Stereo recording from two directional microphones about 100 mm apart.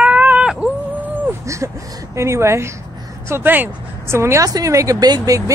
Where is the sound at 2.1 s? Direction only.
30° right (ahead or behind).